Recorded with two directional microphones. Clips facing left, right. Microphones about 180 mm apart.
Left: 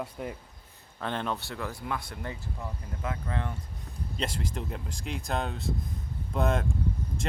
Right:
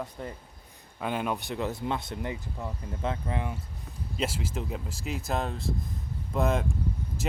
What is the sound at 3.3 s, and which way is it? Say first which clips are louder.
Speech: right 1 dB; 15° right (ahead or behind).